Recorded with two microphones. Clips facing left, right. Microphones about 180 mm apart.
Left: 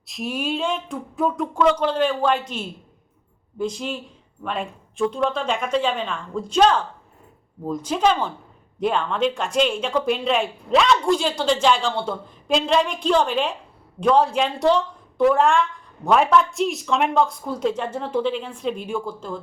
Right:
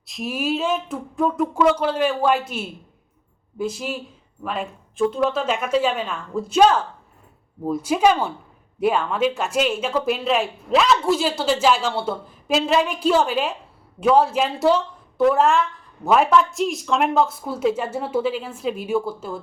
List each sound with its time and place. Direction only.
0.1 s speech: centre (ahead or behind)